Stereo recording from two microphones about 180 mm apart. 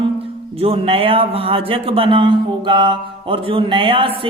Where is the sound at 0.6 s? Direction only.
30° right (ahead or behind).